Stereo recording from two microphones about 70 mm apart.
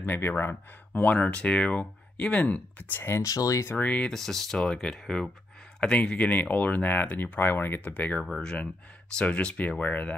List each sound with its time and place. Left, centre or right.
0.0 s speech: left
1.1 s speech: centre
2.9 s speech: left
3.3 s speech: left
3.7 s speech: left
4.1 s speech: centre; by 7.9 s left
7.9 s speech: left